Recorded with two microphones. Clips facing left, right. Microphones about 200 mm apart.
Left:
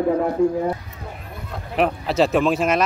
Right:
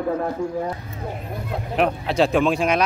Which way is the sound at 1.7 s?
Centre (ahead or behind).